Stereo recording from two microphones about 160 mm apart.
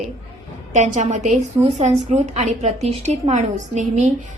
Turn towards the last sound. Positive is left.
turn(degrees=-50)  # may be behind; listen again after turning